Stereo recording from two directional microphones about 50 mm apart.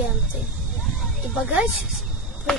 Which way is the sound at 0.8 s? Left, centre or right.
Centre.